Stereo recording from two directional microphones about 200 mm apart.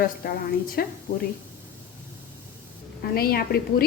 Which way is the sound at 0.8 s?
50° left (ahead or behind).